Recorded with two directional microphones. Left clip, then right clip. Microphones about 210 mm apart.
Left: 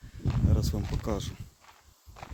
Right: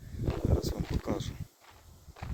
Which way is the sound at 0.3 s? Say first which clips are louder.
Right 1 dB; 10° left (ahead or behind).